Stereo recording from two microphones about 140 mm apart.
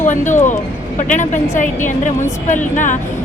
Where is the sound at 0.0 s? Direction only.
65° left (ahead or behind).